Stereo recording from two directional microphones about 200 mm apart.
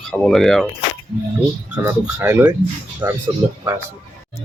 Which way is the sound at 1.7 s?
10° right (ahead or behind).